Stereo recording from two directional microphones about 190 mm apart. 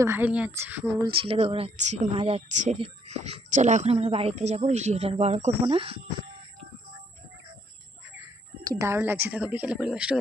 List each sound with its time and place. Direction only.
0.0 s speech: 10° right (ahead or behind)
1.0 s speech: 30° right (ahead or behind)
8.6 s speech: 15° right (ahead or behind)